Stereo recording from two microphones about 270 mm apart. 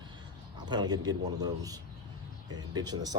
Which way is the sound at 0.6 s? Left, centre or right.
Centre.